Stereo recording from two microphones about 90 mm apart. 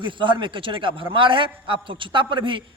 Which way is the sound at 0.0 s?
65° right (ahead or behind).